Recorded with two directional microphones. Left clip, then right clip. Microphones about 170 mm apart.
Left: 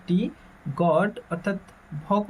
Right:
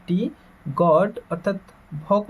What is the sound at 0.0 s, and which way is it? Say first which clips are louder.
Speech: right 1 dB; 35° right (ahead or behind).